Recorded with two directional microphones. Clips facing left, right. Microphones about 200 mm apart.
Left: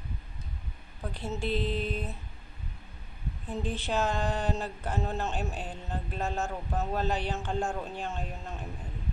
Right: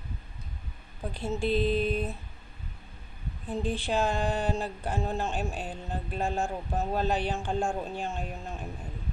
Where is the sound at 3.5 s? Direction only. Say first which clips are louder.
Right 2 dB; 15° right (ahead or behind).